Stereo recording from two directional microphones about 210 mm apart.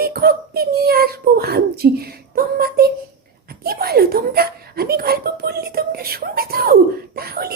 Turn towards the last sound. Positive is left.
turn(degrees=-45)  # may be behind; listen again after turning